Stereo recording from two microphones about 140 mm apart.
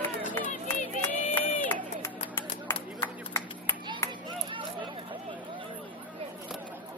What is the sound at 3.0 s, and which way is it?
Clapping, 20° left (ahead or behind).